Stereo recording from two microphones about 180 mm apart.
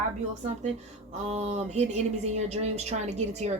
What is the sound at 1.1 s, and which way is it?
A woman's voice, 40° right (ahead or behind).